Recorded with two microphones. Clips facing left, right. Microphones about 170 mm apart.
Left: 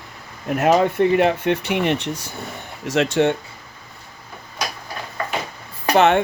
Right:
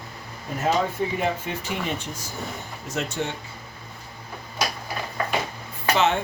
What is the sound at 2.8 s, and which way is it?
Speech, 90° left.